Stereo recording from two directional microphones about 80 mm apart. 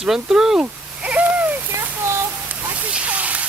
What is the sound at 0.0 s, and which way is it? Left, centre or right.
Speech, centre.